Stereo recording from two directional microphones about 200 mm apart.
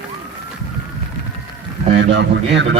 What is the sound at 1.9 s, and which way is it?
Speech, 60° right (ahead or behind).